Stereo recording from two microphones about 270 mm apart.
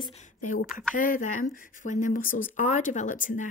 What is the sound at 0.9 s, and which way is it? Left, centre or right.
Speech, left.